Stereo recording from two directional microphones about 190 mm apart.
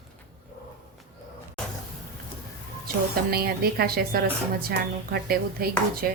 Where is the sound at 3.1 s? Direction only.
55° right (ahead or behind).